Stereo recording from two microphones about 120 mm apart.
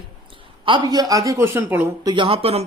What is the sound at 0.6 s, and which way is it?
A woman's voice, 40° right (ahead or behind).